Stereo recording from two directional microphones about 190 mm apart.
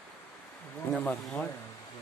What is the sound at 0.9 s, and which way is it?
Speech, 5° left (ahead or behind).